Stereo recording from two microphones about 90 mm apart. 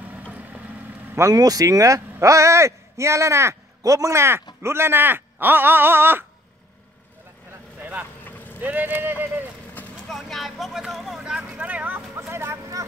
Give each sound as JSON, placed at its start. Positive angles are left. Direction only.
{"t": 0.3, "sound": "vehicle", "side_deg": -20}
{"t": 1.3, "sound": "speech", "side_deg": -45}
{"t": 7.8, "sound": "vehicle", "side_deg": -20}
{"t": 8.2, "sound": "vehicle", "side_deg": 20}
{"t": 8.5, "sound": "speech", "side_deg": -20}
{"t": 10.0, "sound": "speech", "side_deg": 0}
{"t": 11.5, "sound": "speech", "side_deg": -15}
{"t": 12.2, "sound": "speech", "side_deg": -30}